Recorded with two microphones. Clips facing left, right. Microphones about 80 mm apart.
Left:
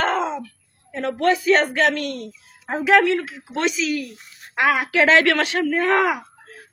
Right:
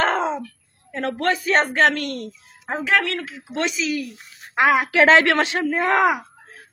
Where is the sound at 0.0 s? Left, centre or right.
Right.